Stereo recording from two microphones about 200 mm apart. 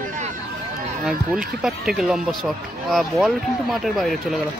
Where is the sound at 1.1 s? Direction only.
5° right (ahead or behind).